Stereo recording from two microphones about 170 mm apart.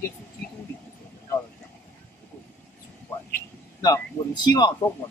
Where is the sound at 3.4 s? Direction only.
20° left (ahead or behind).